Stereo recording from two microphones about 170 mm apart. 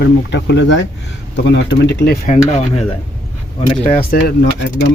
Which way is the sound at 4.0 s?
60° left (ahead or behind).